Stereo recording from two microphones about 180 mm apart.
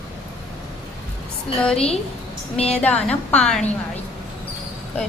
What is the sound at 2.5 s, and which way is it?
Speech, 35° left (ahead or behind).